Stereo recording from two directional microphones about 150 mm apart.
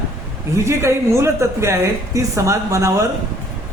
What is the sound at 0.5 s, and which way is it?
Speech, 20° right (ahead or behind).